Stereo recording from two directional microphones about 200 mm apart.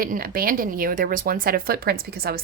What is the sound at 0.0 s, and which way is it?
Speech, 45° right (ahead or behind).